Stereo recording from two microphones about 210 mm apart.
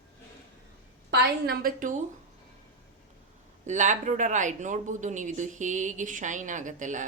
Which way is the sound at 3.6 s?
35° right (ahead or behind).